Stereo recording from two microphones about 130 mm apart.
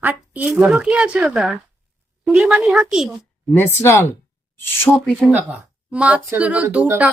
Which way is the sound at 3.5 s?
15° left (ahead or behind).